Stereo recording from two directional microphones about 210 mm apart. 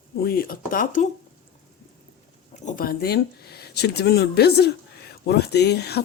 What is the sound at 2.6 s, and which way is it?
Speech, 40° left (ahead or behind).